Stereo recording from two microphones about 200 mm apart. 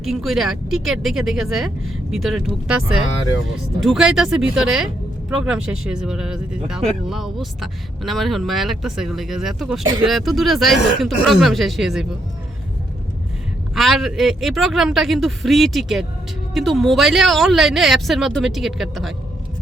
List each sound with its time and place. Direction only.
0.0 s speech: centre (ahead or behind)
13.7 s speech: centre (ahead or behind)